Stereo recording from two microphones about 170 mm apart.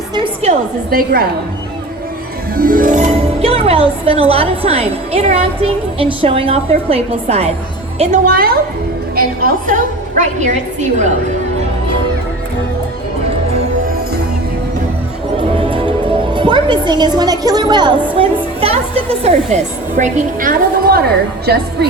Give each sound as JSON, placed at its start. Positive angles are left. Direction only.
{"t": 0.9, "sound": "a woman's voice", "side_deg": -60}
{"t": 2.6, "sound": "a woman's voice", "side_deg": -55}
{"t": 9.1, "sound": "a woman's voice", "side_deg": -55}
{"t": 15.4, "sound": "a woman's voice", "side_deg": -30}
{"t": 21.4, "sound": "a woman's voice", "side_deg": -70}